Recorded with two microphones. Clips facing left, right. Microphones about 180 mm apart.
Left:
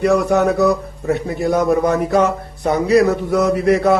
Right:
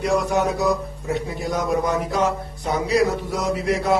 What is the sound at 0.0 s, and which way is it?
A man's voice, 60° left (ahead or behind).